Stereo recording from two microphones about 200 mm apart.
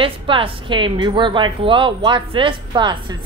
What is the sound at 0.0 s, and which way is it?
A woman's voice, 25° right (ahead or behind).